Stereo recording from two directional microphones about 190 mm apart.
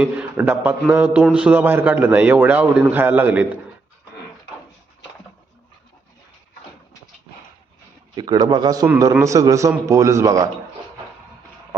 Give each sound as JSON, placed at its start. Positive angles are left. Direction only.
{"t": 0.0, "sound": "a man's voice", "side_deg": -5}
{"t": 8.1, "sound": "a man's voice", "side_deg": -20}